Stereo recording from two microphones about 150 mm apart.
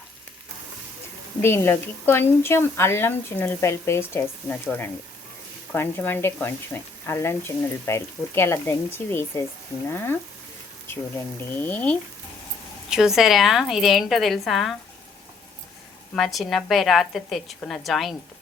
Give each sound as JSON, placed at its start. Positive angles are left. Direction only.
{"t": 1.4, "sound": "speech", "side_deg": 15}
{"t": 11.3, "sound": "speech", "side_deg": 10}
{"t": 12.9, "sound": "a woman's voice", "side_deg": -5}
{"t": 16.1, "sound": "a woman's voice", "side_deg": 0}